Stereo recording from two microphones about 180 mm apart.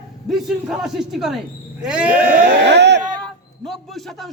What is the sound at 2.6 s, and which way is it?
Speech, 70° right (ahead or behind).